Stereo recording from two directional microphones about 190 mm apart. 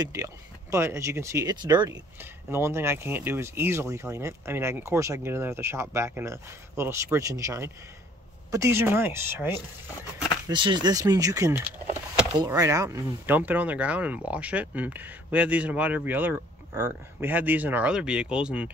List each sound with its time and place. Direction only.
0.0 s speech: 15° right (ahead or behind)
10.5 s speech: 25° right (ahead or behind)
12.2 s power windows: 5° right (ahead or behind)
12.5 s speech: 15° right (ahead or behind)